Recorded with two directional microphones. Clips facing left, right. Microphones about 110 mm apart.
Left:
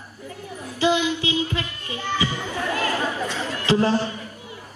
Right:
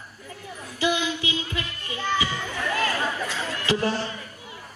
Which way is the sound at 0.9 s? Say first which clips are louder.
Left 5 dB; 20° left (ahead or behind).